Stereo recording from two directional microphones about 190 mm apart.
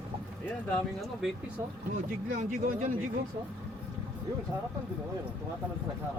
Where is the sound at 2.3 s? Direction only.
45° right (ahead or behind).